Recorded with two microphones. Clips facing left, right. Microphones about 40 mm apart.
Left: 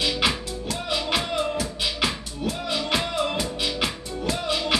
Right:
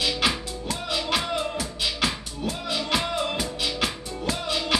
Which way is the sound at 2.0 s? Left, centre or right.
Centre.